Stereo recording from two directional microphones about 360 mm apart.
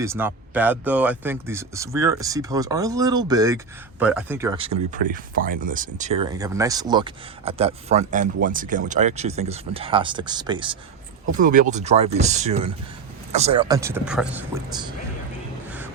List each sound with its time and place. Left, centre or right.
0.0 s speech: centre